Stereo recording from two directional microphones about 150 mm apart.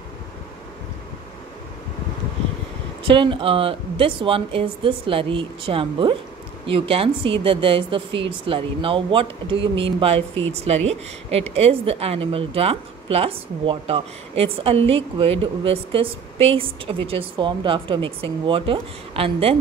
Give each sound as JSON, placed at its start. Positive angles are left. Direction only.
{"t": 3.1, "sound": "speech", "side_deg": -35}